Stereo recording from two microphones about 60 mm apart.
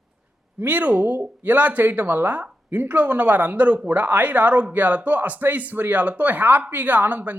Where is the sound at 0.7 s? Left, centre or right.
Right.